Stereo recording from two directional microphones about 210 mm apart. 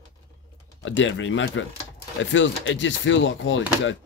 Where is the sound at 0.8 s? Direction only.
65° left (ahead or behind).